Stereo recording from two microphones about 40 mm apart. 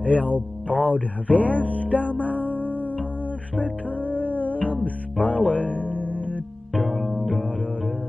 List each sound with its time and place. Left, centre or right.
0.3 s music: left
6.8 s music: centre